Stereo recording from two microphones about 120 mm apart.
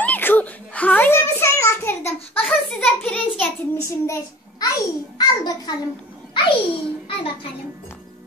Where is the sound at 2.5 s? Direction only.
5° left (ahead or behind).